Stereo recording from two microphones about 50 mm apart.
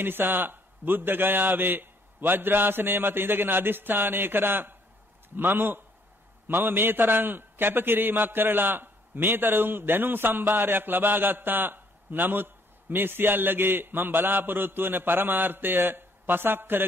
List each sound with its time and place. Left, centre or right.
0.0 s a man's voice: right